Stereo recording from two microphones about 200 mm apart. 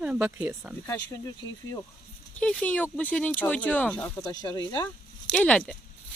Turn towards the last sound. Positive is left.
turn(degrees=5)  # may be behind; listen again after turning